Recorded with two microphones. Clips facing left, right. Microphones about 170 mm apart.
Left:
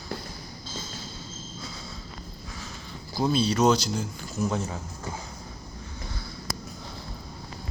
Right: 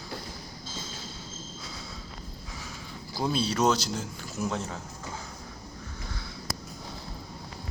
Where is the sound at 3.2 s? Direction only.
5° right (ahead or behind).